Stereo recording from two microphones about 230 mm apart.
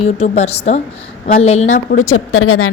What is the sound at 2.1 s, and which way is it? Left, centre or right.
Speech, left.